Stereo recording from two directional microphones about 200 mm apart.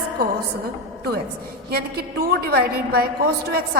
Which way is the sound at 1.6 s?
50° right (ahead or behind).